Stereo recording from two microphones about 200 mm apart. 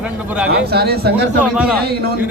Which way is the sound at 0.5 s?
55° right (ahead or behind).